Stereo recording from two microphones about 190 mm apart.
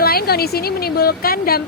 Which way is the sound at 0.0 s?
55° left (ahead or behind).